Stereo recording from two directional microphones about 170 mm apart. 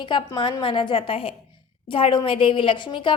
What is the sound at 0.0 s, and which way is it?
A woman's voice, 30° left (ahead or behind).